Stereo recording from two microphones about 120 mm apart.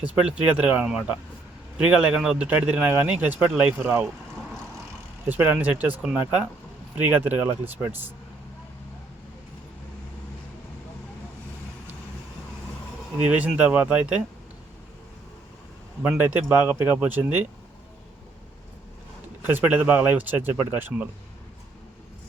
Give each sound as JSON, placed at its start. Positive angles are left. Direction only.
{"t": 0.0, "sound": "speech", "side_deg": -10}
{"t": 5.3, "sound": "speech", "side_deg": -15}
{"t": 13.1, "sound": "speech", "side_deg": -15}
{"t": 16.0, "sound": "speech", "side_deg": -15}
{"t": 19.5, "sound": "speech", "side_deg": -15}